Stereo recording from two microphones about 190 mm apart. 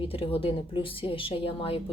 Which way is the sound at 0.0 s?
30° left (ahead or behind).